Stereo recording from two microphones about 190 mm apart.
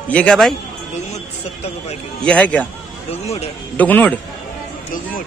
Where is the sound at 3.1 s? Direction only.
35° left (ahead or behind).